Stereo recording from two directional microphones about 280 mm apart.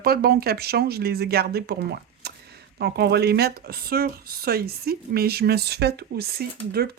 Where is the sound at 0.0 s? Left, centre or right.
Right.